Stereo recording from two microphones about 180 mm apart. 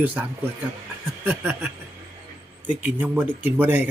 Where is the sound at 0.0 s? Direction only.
10° right (ahead or behind).